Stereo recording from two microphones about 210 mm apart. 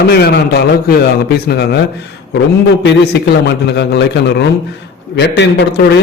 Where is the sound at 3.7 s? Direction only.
55° left (ahead or behind).